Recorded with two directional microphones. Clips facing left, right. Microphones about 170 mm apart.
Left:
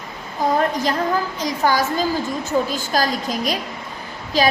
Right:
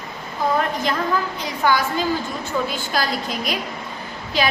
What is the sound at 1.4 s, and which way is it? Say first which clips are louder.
A woman's voice: left 1 dB; 40° left (ahead or behind).